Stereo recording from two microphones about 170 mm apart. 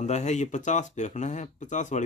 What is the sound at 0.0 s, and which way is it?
Speech, 40° left (ahead or behind).